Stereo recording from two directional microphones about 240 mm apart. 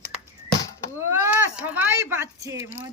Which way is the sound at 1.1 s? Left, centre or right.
Centre.